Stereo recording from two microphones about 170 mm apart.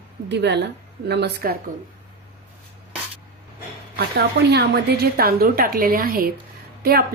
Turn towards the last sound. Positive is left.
turn(degrees=-65)  # may be behind; listen again after turning